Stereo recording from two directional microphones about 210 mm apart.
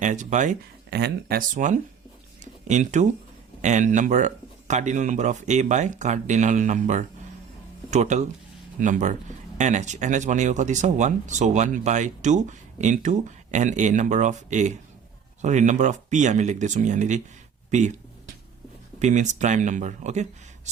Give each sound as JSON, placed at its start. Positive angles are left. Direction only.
{"t": 0.0, "sound": "speech", "side_deg": -35}
{"t": 0.9, "sound": "speech", "side_deg": -50}
{"t": 18.9, "sound": "speech", "side_deg": -35}